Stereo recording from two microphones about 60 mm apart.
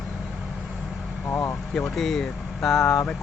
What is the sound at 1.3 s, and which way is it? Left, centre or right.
Speech, left.